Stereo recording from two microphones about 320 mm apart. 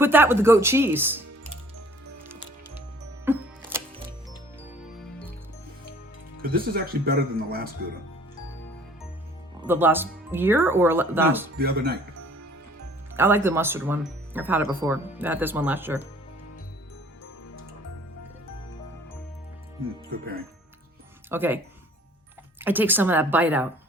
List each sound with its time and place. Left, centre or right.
0.0 s speech: centre
3.2 s music: centre
6.4 s speech: right
9.6 s speech: centre
11.5 s speech: right
13.1 s speech: centre
20.1 s speech: right
21.2 s speech: centre
22.6 s a woman's voice: centre